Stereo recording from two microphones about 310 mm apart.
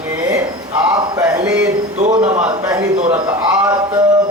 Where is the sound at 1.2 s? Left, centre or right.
Centre.